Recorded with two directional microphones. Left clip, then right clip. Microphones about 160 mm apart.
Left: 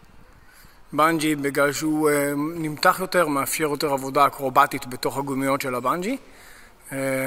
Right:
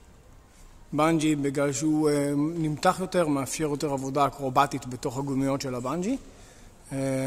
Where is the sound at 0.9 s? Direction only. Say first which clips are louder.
Left 4 dB; 5° left (ahead or behind).